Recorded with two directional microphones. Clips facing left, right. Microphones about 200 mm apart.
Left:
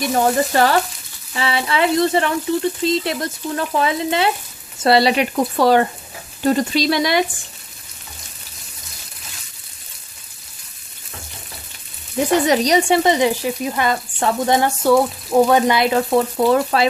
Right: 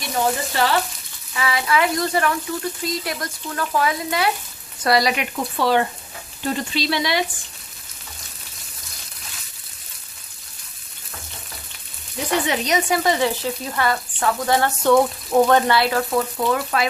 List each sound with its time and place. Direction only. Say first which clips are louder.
0.5 s frying: left 5 dB; 45° left (ahead or behind)
1.3 s speech: left 1 dB; 30° left (ahead or behind)
5.3 s frying: left 4 dB; 45° left (ahead or behind)
12.4 s speech: left 6 dB; 35° left (ahead or behind)
14.8 s frying: left 1 dB; 5° left (ahead or behind); by 16.8 s 30° left (ahead or behind)